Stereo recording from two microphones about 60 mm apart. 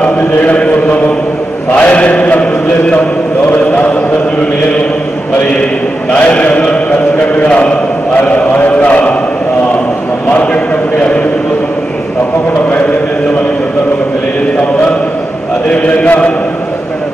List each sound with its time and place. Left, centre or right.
0.0 s a sound: left
1.8 s mantra: left
3.4 s chant: left
6.1 s mantra: left
8.3 s chant: left
10.3 s a sound: left
16.1 s a man's voice: left